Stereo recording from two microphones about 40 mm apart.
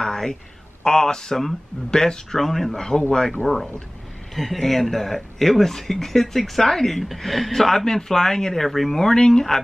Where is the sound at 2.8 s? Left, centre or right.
Centre.